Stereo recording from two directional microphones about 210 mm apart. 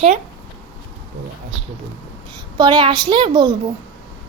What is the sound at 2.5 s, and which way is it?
Speech, 20° right (ahead or behind).